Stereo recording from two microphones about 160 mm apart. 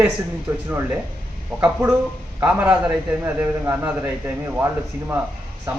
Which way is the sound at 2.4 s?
10° right (ahead or behind).